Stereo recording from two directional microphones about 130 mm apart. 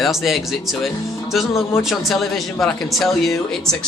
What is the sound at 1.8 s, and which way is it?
Speech, centre (ahead or behind).